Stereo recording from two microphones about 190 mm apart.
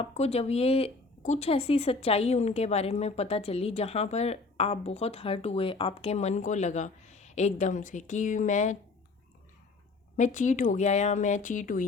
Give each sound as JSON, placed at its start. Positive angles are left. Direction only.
{"t": 0.0, "sound": "speech", "side_deg": 35}
{"t": 10.2, "sound": "speech", "side_deg": 40}